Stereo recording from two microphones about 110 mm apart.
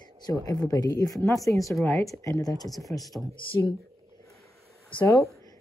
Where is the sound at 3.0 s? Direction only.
Centre (ahead or behind).